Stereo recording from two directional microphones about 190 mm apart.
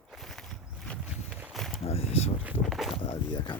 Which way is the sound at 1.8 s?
30° left (ahead or behind).